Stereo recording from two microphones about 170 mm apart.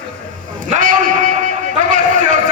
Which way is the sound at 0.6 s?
50° right (ahead or behind).